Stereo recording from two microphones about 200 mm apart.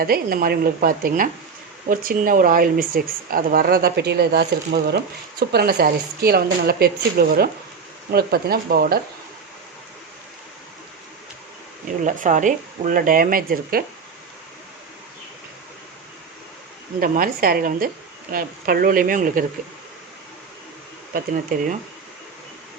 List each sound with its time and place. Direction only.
0.0 s a woman's voice: 45° right (ahead or behind)
12.0 s a woman's voice: 40° right (ahead or behind)
17.0 s a woman's voice: 45° right (ahead or behind)
21.1 s a woman's voice: 40° right (ahead or behind)